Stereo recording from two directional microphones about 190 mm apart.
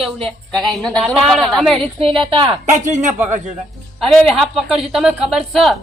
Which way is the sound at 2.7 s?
40° right (ahead or behind).